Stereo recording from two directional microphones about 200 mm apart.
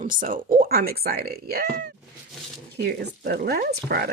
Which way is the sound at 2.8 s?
55° right (ahead or behind).